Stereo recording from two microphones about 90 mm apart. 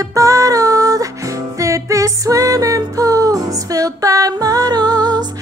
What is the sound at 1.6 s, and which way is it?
Music, 35° right (ahead or behind).